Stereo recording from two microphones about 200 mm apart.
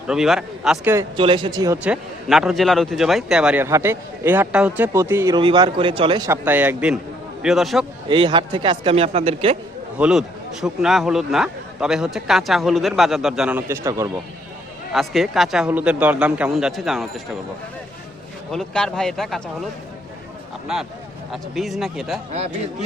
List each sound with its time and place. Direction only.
0.1 s a man's voice: 5° right (ahead or behind)
0.9 s a man's voice: 25° right (ahead or behind); by 7.9 s centre (ahead or behind)
8.0 s speech: 25° right (ahead or behind)
10.0 s a man's voice: 5° right (ahead or behind)
14.9 s a man's voice: centre (ahead or behind)
18.5 s a man's voice: 5° left (ahead or behind)
20.7 s a man's voice: 5° right (ahead or behind)
22.3 s a man's voice: 30° right (ahead or behind)